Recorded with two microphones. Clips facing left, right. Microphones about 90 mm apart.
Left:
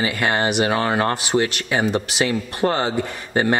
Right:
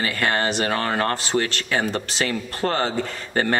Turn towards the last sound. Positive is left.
turn(degrees=15)  # may be behind; listen again after turning